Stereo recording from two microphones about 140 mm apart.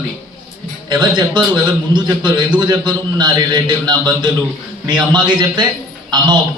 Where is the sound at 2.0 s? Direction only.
30° right (ahead or behind).